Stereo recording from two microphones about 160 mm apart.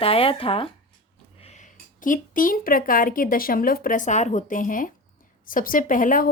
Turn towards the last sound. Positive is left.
turn(degrees=55)  # may be behind; listen again after turning